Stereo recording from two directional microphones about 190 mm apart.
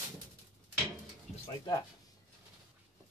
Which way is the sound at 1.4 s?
20° left (ahead or behind).